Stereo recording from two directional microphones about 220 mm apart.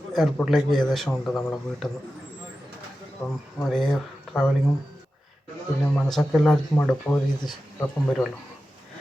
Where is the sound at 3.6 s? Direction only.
Centre (ahead or behind).